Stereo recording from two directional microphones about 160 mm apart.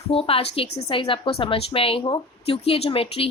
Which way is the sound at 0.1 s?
35° left (ahead or behind).